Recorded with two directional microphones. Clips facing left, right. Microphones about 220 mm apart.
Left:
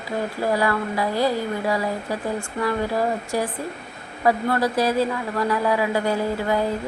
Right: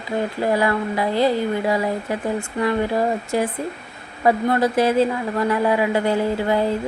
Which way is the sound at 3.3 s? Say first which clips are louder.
Right 3 dB; 25° right (ahead or behind).